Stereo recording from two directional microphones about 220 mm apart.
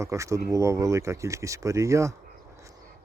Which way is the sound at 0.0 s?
15° right (ahead or behind).